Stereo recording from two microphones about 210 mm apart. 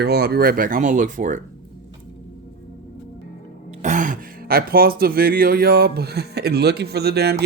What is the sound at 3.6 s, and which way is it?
Speech, 35° right (ahead or behind).